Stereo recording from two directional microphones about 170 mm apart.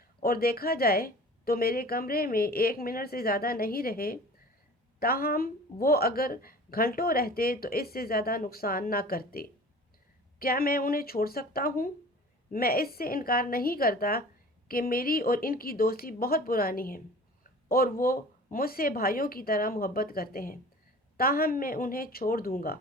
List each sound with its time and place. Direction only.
0.0 s speech: 60° left (ahead or behind)
17.4 s a sound: 60° left (ahead or behind)
18.5 s speech: 60° left (ahead or behind)